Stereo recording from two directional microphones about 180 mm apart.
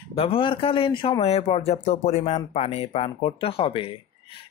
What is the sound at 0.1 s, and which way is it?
Speech, 30° left (ahead or behind).